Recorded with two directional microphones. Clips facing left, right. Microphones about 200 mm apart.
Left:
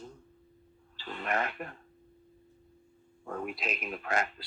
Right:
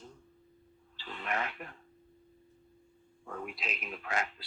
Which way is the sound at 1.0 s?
45° left (ahead or behind).